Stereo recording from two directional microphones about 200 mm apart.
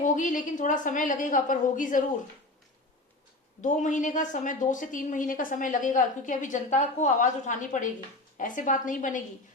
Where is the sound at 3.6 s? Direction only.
40° left (ahead or behind).